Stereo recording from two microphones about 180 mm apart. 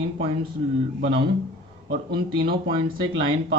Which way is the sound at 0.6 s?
30° right (ahead or behind).